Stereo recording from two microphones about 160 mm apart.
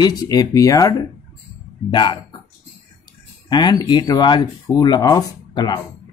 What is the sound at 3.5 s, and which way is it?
Speech, 30° left (ahead or behind).